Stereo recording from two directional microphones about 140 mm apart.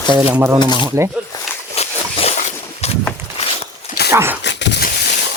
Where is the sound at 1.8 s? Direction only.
45° left (ahead or behind).